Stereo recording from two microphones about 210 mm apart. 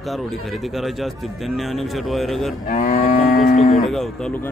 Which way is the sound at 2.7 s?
40° left (ahead or behind).